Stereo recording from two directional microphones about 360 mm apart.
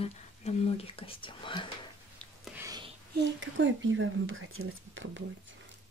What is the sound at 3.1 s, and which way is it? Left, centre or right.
Speech, right.